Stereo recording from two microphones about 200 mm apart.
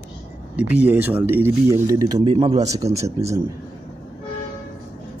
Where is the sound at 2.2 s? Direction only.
25° right (ahead or behind).